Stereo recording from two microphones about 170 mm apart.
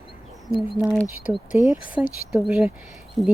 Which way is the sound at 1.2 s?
10° right (ahead or behind).